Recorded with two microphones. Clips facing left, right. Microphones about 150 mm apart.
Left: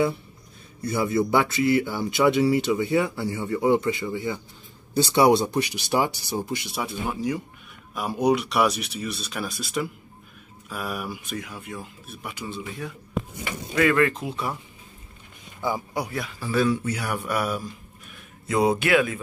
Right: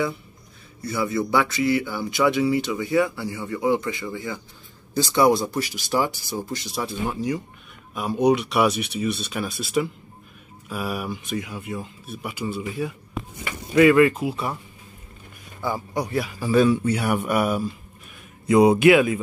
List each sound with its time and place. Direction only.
0.9 s speech: 25° left (ahead or behind)
6.7 s speech: 5° left (ahead or behind)
15.6 s a man's voice: 10° left (ahead or behind)
16.2 s speech: 10° right (ahead or behind)